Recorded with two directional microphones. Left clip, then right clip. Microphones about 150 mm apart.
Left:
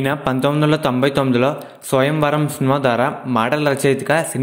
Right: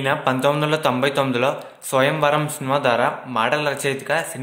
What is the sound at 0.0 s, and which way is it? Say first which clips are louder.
A man's voice: even; 40° left (ahead or behind).